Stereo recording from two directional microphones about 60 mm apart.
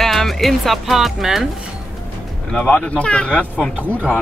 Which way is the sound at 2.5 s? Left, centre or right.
Centre.